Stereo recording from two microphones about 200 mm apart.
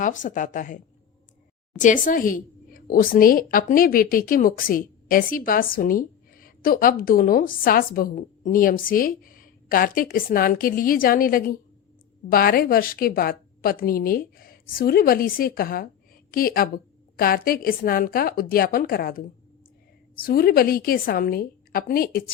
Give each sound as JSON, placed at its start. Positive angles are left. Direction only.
{"t": 0.0, "sound": "a woman's voice", "side_deg": 40}
{"t": 20.2, "sound": "a woman's voice", "side_deg": 50}